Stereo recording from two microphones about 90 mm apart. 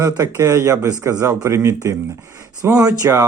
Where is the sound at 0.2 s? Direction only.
35° right (ahead or behind).